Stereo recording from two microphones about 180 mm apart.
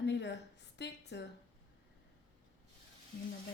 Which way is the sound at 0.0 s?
75° left (ahead or behind).